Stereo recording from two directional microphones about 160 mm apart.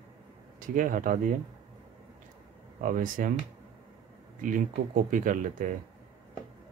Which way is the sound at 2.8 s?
55° right (ahead or behind).